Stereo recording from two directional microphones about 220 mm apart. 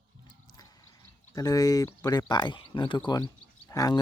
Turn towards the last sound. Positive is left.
turn(degrees=15)  # may be behind; listen again after turning